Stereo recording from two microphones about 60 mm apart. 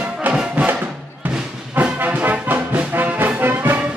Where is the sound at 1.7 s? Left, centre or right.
Right.